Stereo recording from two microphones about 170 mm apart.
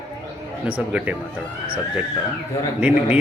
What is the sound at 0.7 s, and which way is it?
Speech, 10° right (ahead or behind).